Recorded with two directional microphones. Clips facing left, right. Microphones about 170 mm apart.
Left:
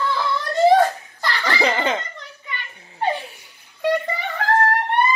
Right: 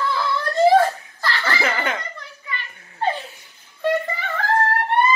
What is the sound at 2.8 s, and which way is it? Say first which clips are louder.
Giggle: even; 15° left (ahead or behind).